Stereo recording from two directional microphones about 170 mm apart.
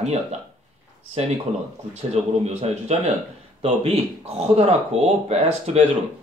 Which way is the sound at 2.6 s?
40° right (ahead or behind).